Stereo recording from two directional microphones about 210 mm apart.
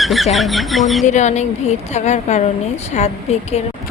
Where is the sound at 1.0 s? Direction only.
35° left (ahead or behind).